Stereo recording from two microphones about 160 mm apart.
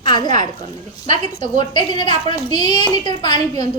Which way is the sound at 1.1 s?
45° right (ahead or behind).